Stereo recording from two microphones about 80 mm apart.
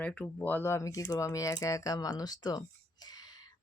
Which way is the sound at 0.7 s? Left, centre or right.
Left.